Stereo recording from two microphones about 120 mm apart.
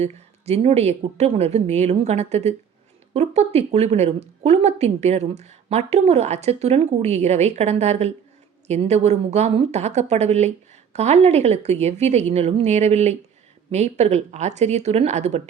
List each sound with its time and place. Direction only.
0.0 s a woman's voice: 65° right (ahead or behind)